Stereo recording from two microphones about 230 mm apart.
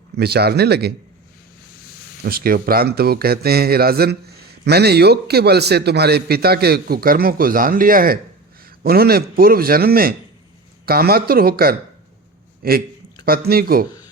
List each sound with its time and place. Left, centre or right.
0.2 s a man's voice: right
2.2 s a man's voice: right